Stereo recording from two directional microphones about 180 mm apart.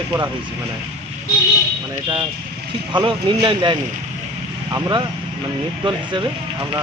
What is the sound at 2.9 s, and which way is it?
Speech, 25° right (ahead or behind).